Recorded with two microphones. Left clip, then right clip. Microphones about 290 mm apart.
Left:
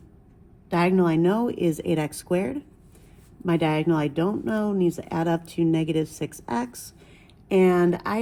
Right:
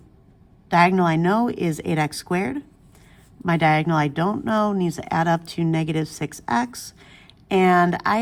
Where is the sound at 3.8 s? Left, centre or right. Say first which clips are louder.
Right 2 dB; right.